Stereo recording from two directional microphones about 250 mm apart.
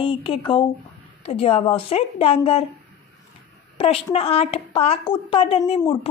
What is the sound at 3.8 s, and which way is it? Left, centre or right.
A woman's voice, left.